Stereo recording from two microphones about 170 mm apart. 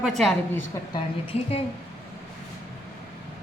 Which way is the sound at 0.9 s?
35° left (ahead or behind).